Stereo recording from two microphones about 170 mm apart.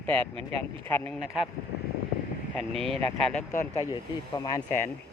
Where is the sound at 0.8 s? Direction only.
10° left (ahead or behind).